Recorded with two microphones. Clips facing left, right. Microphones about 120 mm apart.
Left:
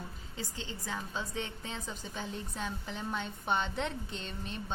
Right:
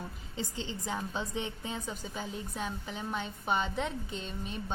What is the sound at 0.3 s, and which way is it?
A woman's voice, 15° right (ahead or behind).